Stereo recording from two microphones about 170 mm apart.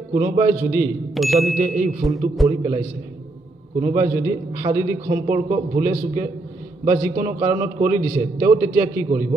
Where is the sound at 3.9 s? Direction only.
15° right (ahead or behind).